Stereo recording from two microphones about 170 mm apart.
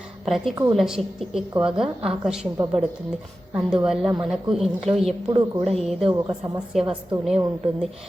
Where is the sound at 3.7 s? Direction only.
5° right (ahead or behind).